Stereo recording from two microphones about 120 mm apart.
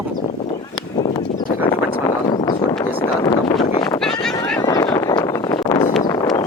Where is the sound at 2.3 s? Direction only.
35° left (ahead or behind).